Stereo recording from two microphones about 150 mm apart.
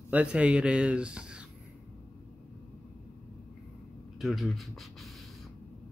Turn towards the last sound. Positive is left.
turn(degrees=0)  # may be behind; listen again after turning